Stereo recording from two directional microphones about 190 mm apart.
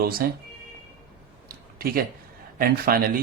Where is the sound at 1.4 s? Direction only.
50° right (ahead or behind).